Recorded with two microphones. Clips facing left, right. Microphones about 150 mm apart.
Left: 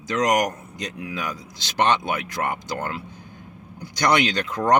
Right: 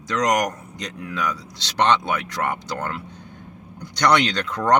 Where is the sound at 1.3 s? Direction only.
75° right (ahead or behind).